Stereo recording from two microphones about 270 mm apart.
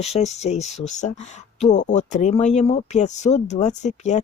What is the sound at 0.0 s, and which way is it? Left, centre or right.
Speech, left.